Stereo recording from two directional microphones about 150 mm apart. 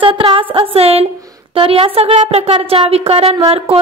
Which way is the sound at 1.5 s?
35° right (ahead or behind).